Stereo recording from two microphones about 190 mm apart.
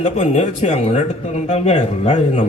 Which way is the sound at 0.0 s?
35° left (ahead or behind).